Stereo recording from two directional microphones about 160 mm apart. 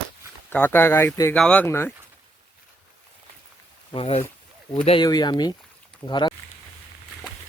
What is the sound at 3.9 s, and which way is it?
Speech, 35° left (ahead or behind).